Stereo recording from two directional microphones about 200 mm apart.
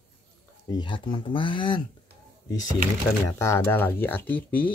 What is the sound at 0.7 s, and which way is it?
Speech, 25° left (ahead or behind).